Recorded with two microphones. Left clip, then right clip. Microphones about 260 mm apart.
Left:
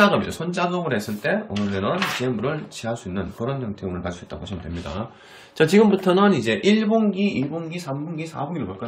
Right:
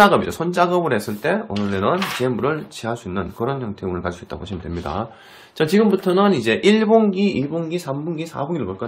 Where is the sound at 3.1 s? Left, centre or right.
Centre.